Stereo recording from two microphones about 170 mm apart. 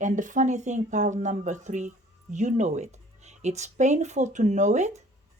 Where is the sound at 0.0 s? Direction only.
50° right (ahead or behind).